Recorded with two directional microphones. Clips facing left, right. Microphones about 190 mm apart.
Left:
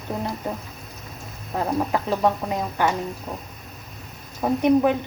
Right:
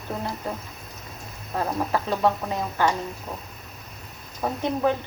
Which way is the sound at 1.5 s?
15° left (ahead or behind).